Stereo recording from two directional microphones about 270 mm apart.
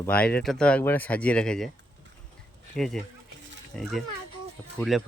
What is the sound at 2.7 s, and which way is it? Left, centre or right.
Speech, centre.